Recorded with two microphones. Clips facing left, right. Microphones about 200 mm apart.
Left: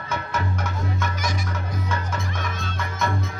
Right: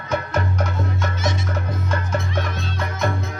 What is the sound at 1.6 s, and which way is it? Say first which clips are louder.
Music: right 3 dB; 55° right (ahead or behind).